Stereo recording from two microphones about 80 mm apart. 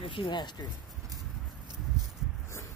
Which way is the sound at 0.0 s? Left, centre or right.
Left.